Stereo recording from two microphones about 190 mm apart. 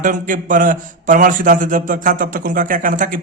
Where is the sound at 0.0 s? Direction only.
45° right (ahead or behind).